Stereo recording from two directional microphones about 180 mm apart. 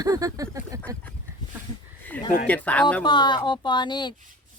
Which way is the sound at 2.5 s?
10° left (ahead or behind).